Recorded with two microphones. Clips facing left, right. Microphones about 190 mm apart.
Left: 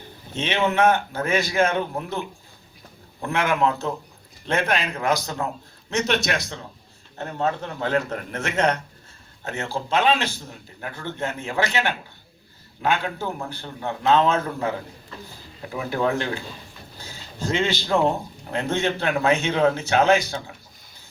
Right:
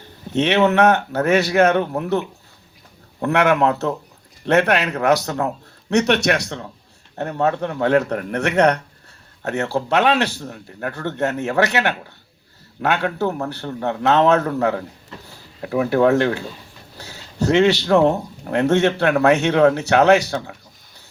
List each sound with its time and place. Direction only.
0.3 s speech: 65° right (ahead or behind)